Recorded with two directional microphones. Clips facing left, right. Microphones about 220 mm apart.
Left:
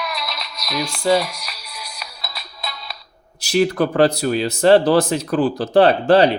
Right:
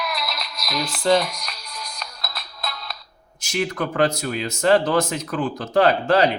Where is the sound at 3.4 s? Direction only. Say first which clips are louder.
Left 8 dB; 35° left (ahead or behind).